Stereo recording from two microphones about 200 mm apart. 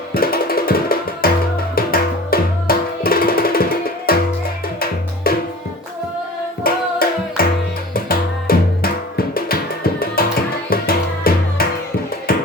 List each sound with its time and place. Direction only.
0.1 s music: 50° left (ahead or behind)
6.6 s music: 50° left (ahead or behind)